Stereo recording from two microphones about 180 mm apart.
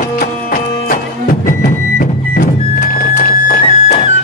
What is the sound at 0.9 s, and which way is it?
Music, 50° left (ahead or behind).